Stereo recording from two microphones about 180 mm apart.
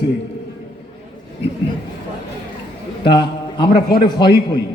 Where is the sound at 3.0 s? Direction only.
25° left (ahead or behind).